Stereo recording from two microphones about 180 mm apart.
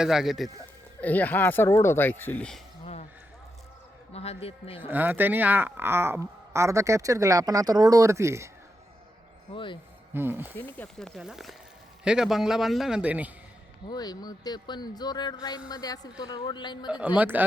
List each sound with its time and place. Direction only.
0.0 s a man's voice: centre (ahead or behind)
2.8 s a sound: 40° left (ahead or behind)
4.1 s a man's voice: 35° left (ahead or behind)
4.9 s a woman's voice: 10° right (ahead or behind)
10.2 s a woman's voice: 10° right (ahead or behind)
10.6 s a man's voice: 5° left (ahead or behind)
13.9 s speech: 20° left (ahead or behind)
17.2 s a woman's voice: 10° right (ahead or behind)